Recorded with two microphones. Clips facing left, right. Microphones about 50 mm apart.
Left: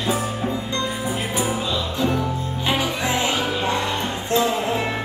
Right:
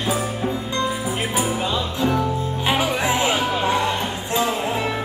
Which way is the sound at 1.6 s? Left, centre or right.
Right.